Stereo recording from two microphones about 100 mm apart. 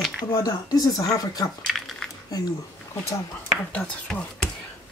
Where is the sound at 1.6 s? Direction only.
5° left (ahead or behind).